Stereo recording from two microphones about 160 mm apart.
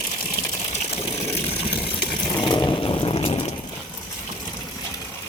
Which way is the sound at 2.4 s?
30° left (ahead or behind).